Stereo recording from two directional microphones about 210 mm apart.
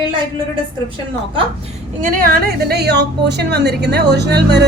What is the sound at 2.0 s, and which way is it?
A woman's voice, 45° right (ahead or behind).